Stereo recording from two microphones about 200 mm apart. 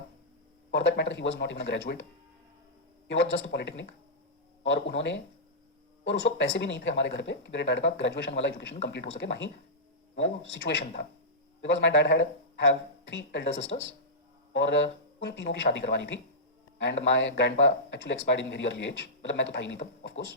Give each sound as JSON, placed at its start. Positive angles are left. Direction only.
{"t": 0.7, "sound": "speech", "side_deg": 60}
{"t": 3.1, "sound": "speech", "side_deg": 65}